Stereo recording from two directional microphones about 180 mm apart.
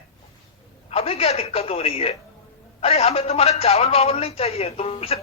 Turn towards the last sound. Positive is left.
turn(degrees=35)  # may be behind; listen again after turning